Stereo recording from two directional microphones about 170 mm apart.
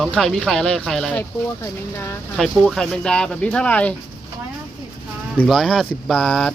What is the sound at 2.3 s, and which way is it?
Speech, centre (ahead or behind).